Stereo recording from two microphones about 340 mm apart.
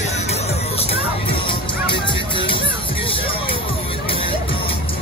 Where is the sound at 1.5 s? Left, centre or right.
Centre.